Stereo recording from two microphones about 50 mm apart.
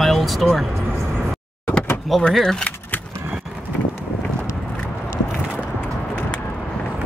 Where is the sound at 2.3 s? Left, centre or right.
Centre.